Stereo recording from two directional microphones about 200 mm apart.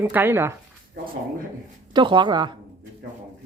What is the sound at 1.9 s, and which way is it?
Speech, 25° right (ahead or behind).